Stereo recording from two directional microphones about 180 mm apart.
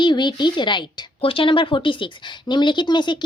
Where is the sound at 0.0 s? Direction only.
25° left (ahead or behind).